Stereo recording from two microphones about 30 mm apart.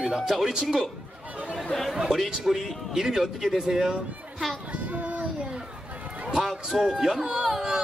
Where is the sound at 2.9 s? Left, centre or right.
Centre.